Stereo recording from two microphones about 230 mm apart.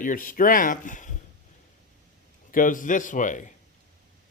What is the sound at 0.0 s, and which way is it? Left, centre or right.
Speech, left.